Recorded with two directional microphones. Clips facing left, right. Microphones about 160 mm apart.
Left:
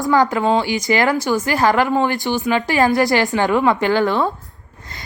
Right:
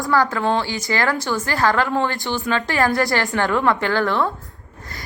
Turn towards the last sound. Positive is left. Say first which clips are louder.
# left 3 dB
turn(degrees=20)  # may be behind; listen again after turning